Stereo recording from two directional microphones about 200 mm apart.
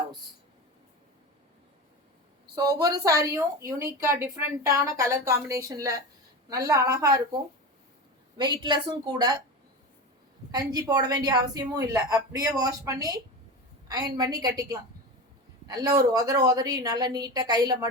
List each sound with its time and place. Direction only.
2.6 s a woman's voice: 20° right (ahead or behind)
10.5 s a woman's voice: 20° right (ahead or behind)
15.6 s a woman's voice: 20° right (ahead or behind)